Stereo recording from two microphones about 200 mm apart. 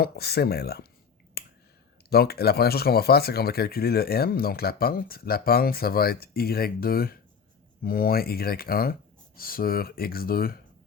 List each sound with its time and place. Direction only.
0.0 s speech: 50° left (ahead or behind)
1.4 s a sound: 50° left (ahead or behind)
2.0 s speech: 50° left (ahead or behind)